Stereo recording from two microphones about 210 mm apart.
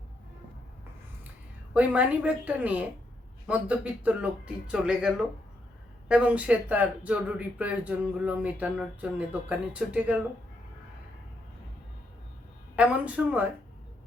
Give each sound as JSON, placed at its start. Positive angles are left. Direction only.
{"t": 1.7, "sound": "speech", "side_deg": -5}
{"t": 12.7, "sound": "speech", "side_deg": -5}